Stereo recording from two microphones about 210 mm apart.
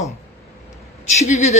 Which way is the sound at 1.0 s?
35° left (ahead or behind).